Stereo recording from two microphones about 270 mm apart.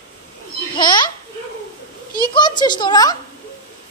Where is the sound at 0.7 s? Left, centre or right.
Centre.